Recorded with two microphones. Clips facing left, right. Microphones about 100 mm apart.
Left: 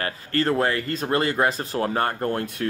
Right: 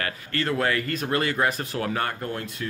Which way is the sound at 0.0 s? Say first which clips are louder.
Left 4 dB; 35° left (ahead or behind).